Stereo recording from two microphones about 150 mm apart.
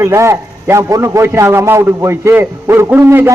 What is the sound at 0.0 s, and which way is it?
A man's voice, 20° right (ahead or behind).